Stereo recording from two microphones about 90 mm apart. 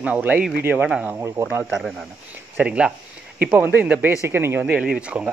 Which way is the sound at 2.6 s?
10° right (ahead or behind).